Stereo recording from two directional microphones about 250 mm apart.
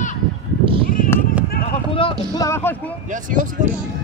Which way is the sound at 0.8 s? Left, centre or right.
Left.